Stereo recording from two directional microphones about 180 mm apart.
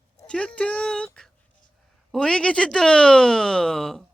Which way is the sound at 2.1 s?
5° left (ahead or behind).